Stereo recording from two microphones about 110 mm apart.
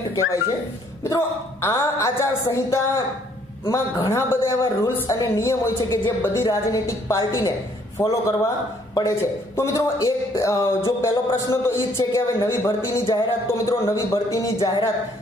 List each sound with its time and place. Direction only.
1.0 s a man's voice: 25° left (ahead or behind)
9.6 s a man's voice: 30° left (ahead or behind)